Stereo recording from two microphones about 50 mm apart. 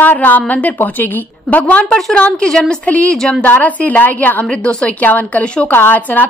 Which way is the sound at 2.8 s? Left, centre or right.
Left.